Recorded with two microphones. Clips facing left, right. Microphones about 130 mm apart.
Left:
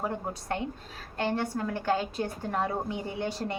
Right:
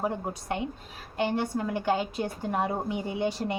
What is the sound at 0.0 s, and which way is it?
A woman's voice, 15° right (ahead or behind).